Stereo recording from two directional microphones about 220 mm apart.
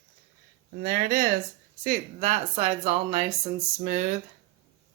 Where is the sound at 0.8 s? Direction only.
40° right (ahead or behind).